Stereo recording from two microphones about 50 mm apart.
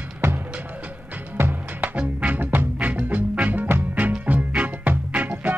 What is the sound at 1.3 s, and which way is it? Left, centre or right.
Music, right.